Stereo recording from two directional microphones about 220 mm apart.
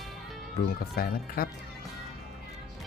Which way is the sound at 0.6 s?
45° left (ahead or behind).